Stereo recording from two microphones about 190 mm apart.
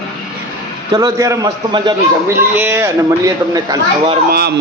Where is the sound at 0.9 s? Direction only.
20° right (ahead or behind).